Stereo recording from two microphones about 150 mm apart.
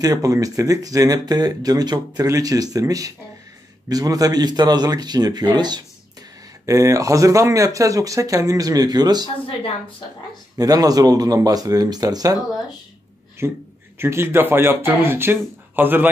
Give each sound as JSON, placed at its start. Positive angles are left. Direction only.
{"t": 0.0, "sound": "speech", "side_deg": -25}
{"t": 10.6, "sound": "speech", "side_deg": -25}
{"t": 13.4, "sound": "speech", "side_deg": -15}